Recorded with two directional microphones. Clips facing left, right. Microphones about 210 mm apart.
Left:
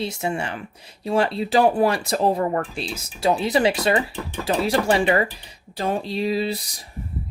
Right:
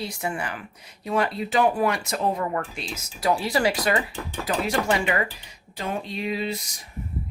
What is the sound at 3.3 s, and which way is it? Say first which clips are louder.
Speech: left 3 dB; 20° left (ahead or behind).